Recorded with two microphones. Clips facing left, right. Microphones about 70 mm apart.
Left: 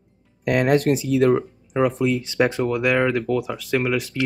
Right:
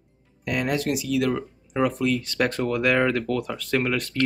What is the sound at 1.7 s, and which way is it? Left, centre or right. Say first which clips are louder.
Speech: left 3 dB; centre.